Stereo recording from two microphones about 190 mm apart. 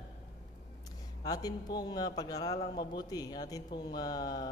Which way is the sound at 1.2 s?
20° left (ahead or behind).